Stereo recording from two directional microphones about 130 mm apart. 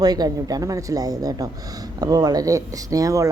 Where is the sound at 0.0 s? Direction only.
30° right (ahead or behind).